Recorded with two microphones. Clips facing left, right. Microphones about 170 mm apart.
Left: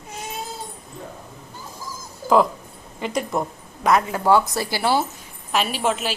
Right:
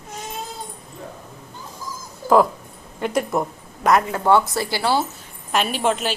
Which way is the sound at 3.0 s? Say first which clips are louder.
Right 3 dB; centre (ahead or behind).